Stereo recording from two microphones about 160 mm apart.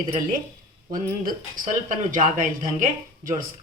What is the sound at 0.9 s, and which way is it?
Speech, 55° right (ahead or behind).